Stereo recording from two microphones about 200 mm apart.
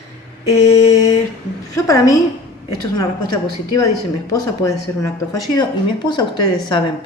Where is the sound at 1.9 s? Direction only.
15° left (ahead or behind).